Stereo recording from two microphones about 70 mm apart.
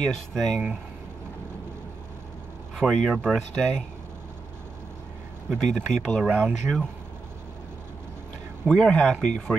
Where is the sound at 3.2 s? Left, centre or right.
Centre.